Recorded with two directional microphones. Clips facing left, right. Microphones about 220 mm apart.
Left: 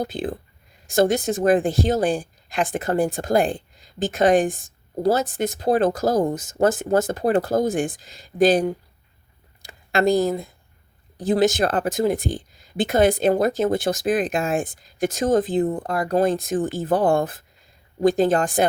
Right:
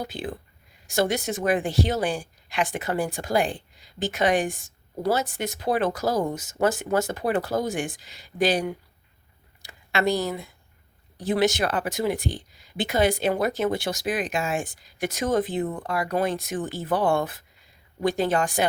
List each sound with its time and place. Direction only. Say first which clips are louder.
0.0 s speech: left 6 dB; 50° left (ahead or behind)
15.2 s speech: left 5 dB; 35° left (ahead or behind)
15.9 s speech: left 3 dB; 45° left (ahead or behind)